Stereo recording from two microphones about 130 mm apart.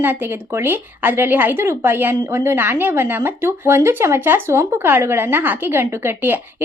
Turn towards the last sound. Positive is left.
turn(degrees=-15)  # may be behind; listen again after turning